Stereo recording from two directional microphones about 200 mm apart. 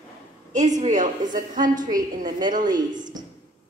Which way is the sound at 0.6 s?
35° right (ahead or behind).